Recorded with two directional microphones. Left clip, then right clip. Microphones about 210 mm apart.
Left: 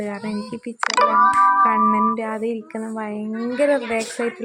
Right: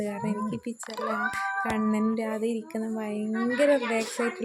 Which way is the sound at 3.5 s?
Centre (ahead or behind).